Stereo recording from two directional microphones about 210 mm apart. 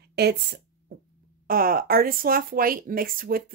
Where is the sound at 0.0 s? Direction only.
50° right (ahead or behind).